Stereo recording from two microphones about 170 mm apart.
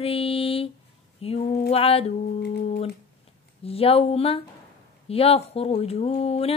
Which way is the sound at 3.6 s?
35° left (ahead or behind).